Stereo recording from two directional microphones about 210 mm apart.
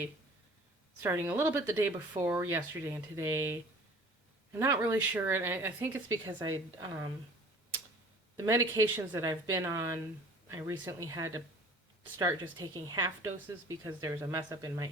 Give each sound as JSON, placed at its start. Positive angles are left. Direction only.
{"t": 1.0, "sound": "speech", "side_deg": -10}
{"t": 8.4, "sound": "a woman's voice", "side_deg": -15}